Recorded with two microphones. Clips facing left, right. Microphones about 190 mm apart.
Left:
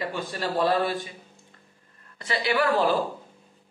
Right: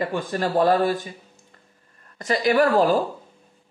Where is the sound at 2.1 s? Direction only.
45° right (ahead or behind).